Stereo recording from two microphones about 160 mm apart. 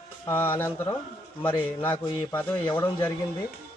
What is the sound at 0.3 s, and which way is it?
Speech, 15° left (ahead or behind).